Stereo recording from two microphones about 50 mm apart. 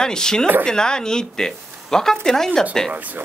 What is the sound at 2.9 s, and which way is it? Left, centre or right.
Speech, right.